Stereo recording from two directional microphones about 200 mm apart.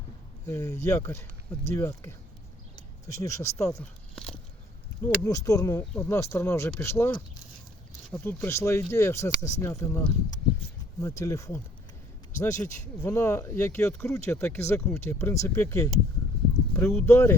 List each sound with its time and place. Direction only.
0.4 s speech: 15° left (ahead or behind)
3.7 s speech: 5° left (ahead or behind)
5.0 s speech: 15° left (ahead or behind)
5.8 s speech: 5° left (ahead or behind)
8.1 s speech: 10° left (ahead or behind)